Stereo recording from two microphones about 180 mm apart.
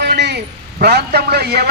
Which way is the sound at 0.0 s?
70° right (ahead or behind).